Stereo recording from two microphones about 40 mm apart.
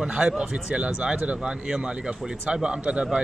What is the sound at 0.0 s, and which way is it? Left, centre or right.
A man's voice, right.